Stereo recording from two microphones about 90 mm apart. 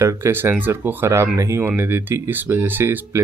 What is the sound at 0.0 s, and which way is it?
Speech, 30° right (ahead or behind).